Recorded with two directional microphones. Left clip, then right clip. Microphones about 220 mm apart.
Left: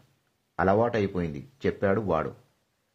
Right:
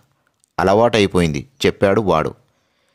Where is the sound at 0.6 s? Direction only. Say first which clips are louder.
Right 10 dB; 45° right (ahead or behind).